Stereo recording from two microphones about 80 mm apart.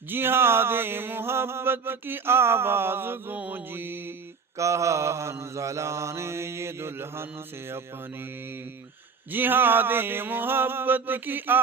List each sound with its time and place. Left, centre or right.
0.1 s mantra: right
4.5 s mantra: right
9.3 s mantra: right